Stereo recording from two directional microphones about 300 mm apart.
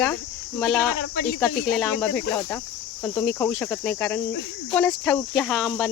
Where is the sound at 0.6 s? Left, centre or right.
Centre.